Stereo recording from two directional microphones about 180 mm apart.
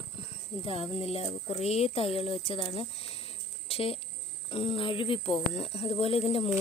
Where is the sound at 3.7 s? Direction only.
30° left (ahead or behind).